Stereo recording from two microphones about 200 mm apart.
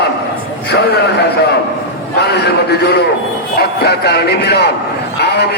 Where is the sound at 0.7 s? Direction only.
55° left (ahead or behind).